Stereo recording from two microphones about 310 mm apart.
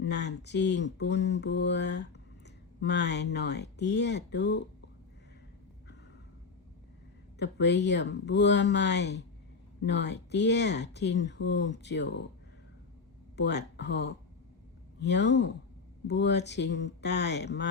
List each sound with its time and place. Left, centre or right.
0.0 s speech: left
7.3 s speech: left
13.3 s speech: left